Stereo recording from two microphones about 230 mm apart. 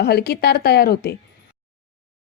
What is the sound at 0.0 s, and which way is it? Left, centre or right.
A woman's voice, left.